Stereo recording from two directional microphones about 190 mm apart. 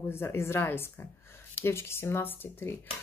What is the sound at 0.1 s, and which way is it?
Speech, 15° left (ahead or behind).